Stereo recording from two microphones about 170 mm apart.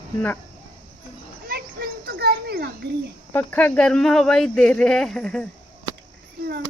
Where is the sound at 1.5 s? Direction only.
60° right (ahead or behind).